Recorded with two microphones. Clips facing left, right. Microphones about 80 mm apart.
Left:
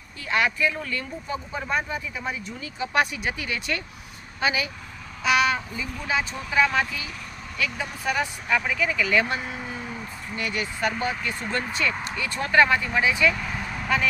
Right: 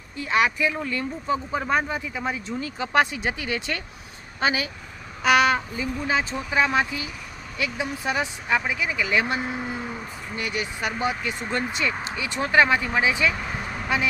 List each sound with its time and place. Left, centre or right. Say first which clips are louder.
0.2 s speech: right 2 dB; right
5.2 s speech: right 3 dB; right
13.8 s speech: left 1 dB; centre